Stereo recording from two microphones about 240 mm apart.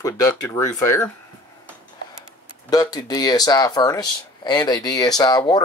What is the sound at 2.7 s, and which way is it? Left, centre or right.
Speech, centre.